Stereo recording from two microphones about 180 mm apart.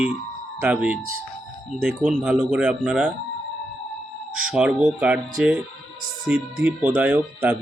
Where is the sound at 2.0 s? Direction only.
5° right (ahead or behind).